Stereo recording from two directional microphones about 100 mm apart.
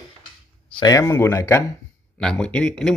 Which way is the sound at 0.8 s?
30° left (ahead or behind).